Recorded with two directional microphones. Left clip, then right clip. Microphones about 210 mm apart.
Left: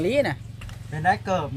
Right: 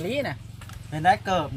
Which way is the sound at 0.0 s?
55° left (ahead or behind).